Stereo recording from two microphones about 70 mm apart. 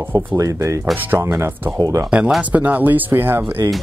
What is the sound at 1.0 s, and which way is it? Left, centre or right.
Speech, right.